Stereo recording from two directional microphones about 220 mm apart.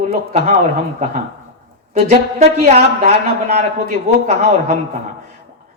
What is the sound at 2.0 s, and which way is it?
A man's voice, 30° right (ahead or behind).